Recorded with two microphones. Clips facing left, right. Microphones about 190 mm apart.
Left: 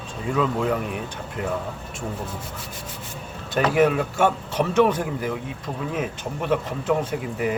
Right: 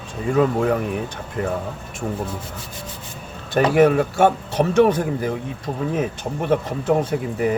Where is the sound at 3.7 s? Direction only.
45° right (ahead or behind).